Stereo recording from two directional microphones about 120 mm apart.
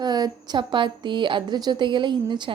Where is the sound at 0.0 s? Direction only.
35° right (ahead or behind).